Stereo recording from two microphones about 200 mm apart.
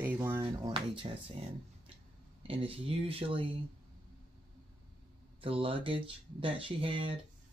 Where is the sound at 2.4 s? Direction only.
30° right (ahead or behind).